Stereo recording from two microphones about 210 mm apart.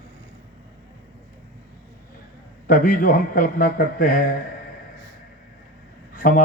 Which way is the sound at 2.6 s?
40° left (ahead or behind).